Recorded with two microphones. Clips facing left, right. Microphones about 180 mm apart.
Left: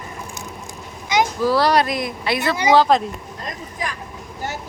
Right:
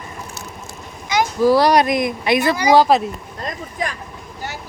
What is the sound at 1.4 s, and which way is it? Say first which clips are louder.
Speech: right 6 dB; 15° right (ahead or behind).